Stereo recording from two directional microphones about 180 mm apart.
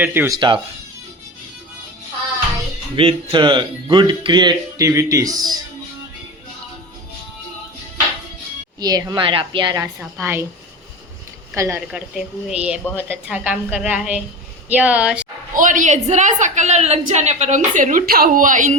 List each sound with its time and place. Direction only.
0.0 s a woman's voice: 10° right (ahead or behind)
0.3 s speech: 25° right (ahead or behind)
2.9 s speech: 30° right (ahead or behind)
8.8 s a woman's voice: 20° right (ahead or behind)
11.5 s a woman's voice: 15° right (ahead or behind)
11.9 s a woman's voice: 5° right (ahead or behind)
15.5 s a woman's voice: 45° right (ahead or behind)